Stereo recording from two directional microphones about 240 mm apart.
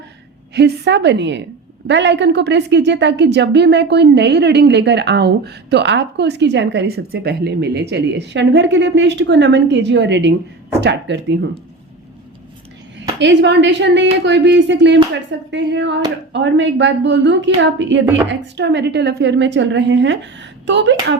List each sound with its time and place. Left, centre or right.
0.5 s a woman's voice: right
13.1 s a woman's voice: right